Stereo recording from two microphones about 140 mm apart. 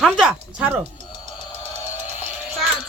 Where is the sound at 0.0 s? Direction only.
5° right (ahead or behind).